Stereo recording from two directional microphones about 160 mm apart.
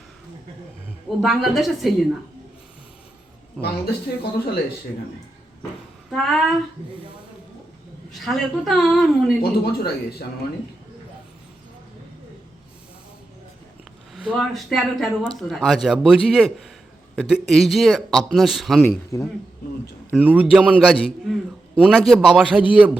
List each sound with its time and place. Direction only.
1.2 s a man's voice: centre (ahead or behind)
3.6 s a man's voice: centre (ahead or behind)
6.1 s a man's voice: centre (ahead or behind)
8.2 s a man's voice: centre (ahead or behind)
9.4 s speech: 70° left (ahead or behind)
14.2 s a man's voice: 5° right (ahead or behind); by 19.3 s 15° left (ahead or behind)
20.1 s a man's voice: 10° right (ahead or behind)